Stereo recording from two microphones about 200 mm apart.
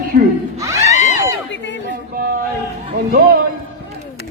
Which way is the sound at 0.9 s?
35° left (ahead or behind).